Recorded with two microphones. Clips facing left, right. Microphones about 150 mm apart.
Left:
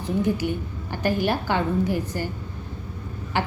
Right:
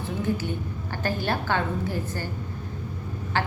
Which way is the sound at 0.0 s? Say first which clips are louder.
Left 4 dB; 15° left (ahead or behind).